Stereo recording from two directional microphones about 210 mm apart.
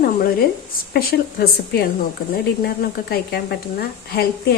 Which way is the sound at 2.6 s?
50° left (ahead or behind).